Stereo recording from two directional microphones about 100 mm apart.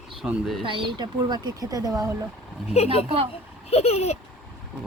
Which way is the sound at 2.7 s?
90° left.